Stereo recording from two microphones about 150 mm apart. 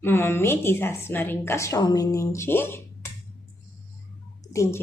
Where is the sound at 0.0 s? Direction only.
15° left (ahead or behind).